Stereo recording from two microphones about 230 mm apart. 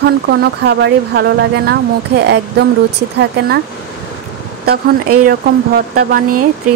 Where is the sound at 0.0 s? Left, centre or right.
Right.